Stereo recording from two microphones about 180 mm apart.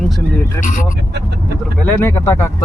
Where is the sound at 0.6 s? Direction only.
45° left (ahead or behind).